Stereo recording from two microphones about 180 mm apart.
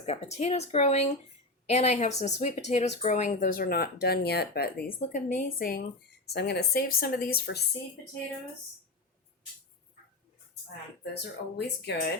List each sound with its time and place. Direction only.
0.0 s speech: 35° left (ahead or behind); by 5.8 s 55° left (ahead or behind)
6.2 s speech: 65° left (ahead or behind)
11.1 s speech: 70° left (ahead or behind)